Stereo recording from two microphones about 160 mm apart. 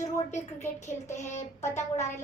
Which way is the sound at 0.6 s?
15° left (ahead or behind).